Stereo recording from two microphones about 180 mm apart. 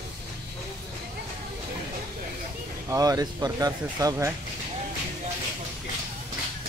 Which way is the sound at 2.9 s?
20° right (ahead or behind).